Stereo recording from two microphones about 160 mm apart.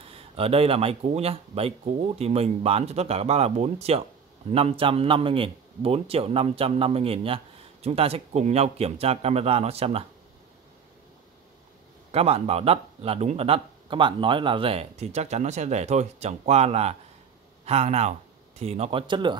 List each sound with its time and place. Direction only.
0.1 s a man's voice: 35° right (ahead or behind)
12.1 s a man's voice: 40° right (ahead or behind)